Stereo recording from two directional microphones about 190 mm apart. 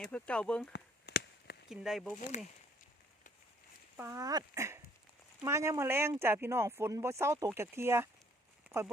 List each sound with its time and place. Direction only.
0.0 s speech: 5° left (ahead or behind)
0.7 s a sound: 60° left (ahead or behind)
1.7 s speech: centre (ahead or behind)
3.9 s speech: 15° right (ahead or behind)